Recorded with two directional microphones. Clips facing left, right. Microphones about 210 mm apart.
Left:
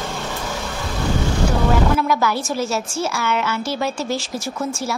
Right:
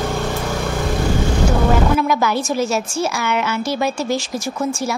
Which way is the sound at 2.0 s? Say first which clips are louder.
Right 2 dB; 20° right (ahead or behind).